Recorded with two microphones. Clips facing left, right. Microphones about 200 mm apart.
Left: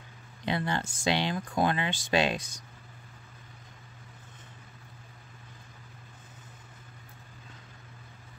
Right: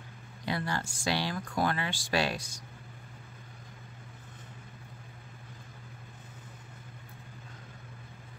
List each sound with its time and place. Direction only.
0.5 s speech: 20° left (ahead or behind)